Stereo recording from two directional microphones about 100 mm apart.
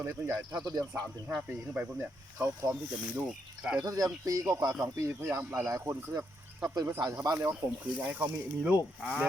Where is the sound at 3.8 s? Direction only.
35° right (ahead or behind); by 5.7 s 20° right (ahead or behind).